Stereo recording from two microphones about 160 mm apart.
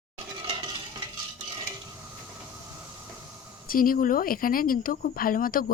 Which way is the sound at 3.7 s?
60° left (ahead or behind).